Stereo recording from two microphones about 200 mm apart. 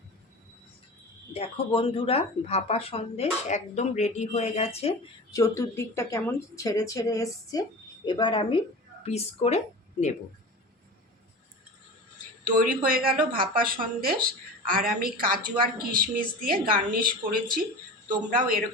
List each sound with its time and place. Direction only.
1.3 s speech: 30° left (ahead or behind)
5.3 s a woman's voice: 15° left (ahead or behind); by 10.2 s 35° left (ahead or behind)
12.5 s speech: 45° right (ahead or behind)